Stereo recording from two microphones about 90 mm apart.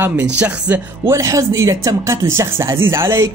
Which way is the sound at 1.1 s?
35° right (ahead or behind).